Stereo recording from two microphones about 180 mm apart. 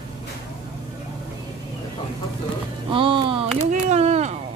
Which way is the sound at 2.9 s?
30° right (ahead or behind).